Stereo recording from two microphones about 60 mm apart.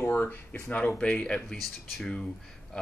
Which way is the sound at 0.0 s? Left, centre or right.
Left.